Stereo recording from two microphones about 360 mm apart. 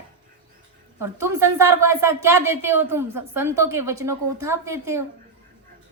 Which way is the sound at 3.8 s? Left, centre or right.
Right.